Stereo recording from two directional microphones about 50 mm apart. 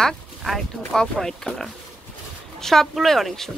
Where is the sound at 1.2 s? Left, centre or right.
Centre.